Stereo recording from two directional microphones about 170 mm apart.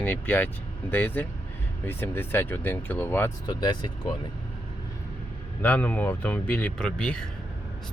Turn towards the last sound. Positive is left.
turn(degrees=5)  # may be behind; listen again after turning